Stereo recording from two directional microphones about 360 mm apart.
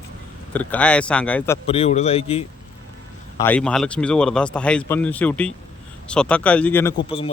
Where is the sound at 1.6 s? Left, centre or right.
Centre.